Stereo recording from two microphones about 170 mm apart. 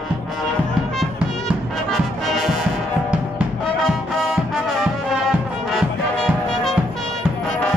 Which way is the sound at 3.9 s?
Centre (ahead or behind).